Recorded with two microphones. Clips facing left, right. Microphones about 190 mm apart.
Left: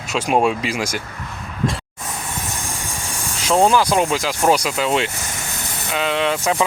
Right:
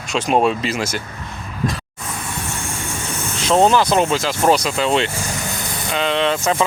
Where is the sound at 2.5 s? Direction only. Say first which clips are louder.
Right 2 dB; 15° left (ahead or behind).